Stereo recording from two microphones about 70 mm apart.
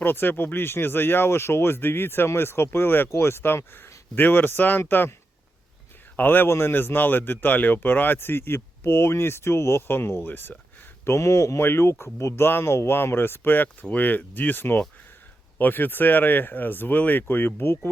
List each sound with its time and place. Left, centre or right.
0.0 s speech: left
6.1 s speech: left
11.0 s speech: left
11.6 s speech: left